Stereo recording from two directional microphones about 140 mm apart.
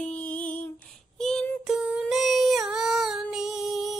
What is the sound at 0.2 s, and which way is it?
Music, 65° left (ahead or behind).